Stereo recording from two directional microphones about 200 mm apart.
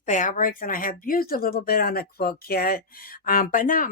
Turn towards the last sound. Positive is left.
turn(degrees=45)  # may be behind; listen again after turning